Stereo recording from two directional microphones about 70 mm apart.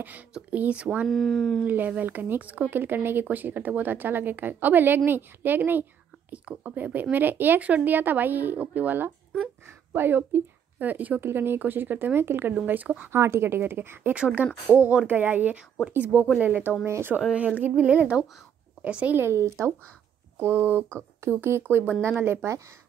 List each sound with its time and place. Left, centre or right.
0.3 s speech: centre
1.0 s speech: centre
1.7 s a woman's voice: right
13.1 s a woman's voice: right
14.1 s a woman's voice: centre; by 17.2 s right
17.6 s a woman's voice: right
19.1 s a woman's voice: right